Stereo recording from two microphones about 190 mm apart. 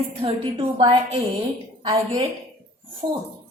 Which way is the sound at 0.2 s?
30° right (ahead or behind).